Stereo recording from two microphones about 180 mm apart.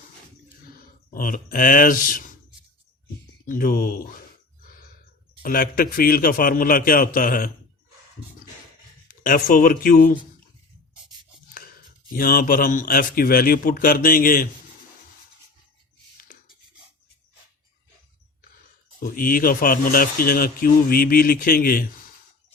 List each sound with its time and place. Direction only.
1.1 s a man's voice: 50° left (ahead or behind)
3.4 s a man's voice: 50° left (ahead or behind)
5.4 s a man's voice: 50° left (ahead or behind)
9.2 s a man's voice: 50° left (ahead or behind)
12.1 s a man's voice: 50° left (ahead or behind)
18.9 s a man's voice: 55° left (ahead or behind)